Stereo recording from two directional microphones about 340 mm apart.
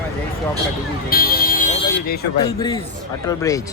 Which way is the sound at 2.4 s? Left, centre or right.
Centre.